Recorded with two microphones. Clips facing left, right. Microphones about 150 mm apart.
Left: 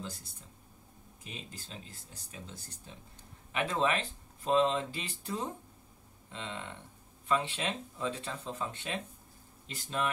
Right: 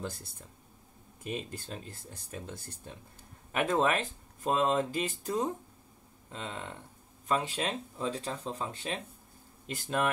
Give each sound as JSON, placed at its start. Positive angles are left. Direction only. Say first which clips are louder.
{"t": 1.2, "sound": "speech", "louder": "right 10 dB", "side_deg": -50}
{"t": 9.7, "sound": "speech", "louder": "right 4 dB", "side_deg": -50}